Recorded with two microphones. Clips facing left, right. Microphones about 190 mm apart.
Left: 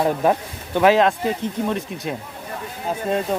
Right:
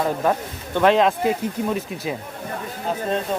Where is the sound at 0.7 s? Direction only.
5° left (ahead or behind).